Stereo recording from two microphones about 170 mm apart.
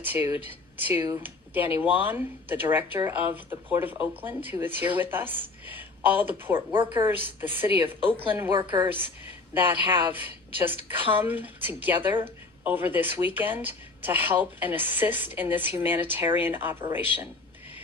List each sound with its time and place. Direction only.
0.0 s speech: 10° right (ahead or behind)
8.5 s a woman's voice: 25° right (ahead or behind)
9.6 s speech: 10° right (ahead or behind)